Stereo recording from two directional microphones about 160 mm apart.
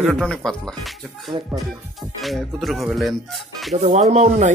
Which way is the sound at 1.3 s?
30° right (ahead or behind).